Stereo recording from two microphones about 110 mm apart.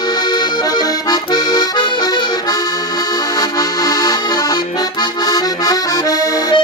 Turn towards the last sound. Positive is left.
turn(degrees=35)  # may be behind; listen again after turning